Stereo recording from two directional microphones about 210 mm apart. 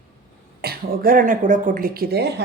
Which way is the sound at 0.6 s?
45° right (ahead or behind).